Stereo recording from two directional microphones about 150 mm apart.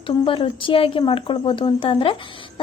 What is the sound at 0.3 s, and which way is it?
Speech, 35° left (ahead or behind).